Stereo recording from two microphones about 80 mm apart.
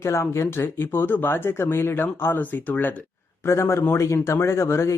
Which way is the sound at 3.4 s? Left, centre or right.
Left.